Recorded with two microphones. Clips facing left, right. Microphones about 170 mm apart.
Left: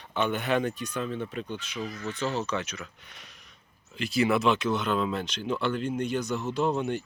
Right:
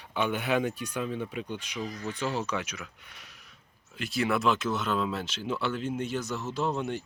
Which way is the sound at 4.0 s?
Centre (ahead or behind).